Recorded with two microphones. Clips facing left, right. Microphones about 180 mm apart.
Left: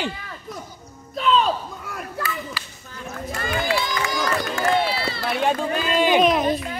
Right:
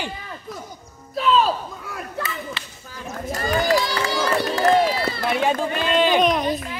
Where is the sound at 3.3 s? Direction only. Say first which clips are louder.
Right 4 dB; 40° right (ahead or behind).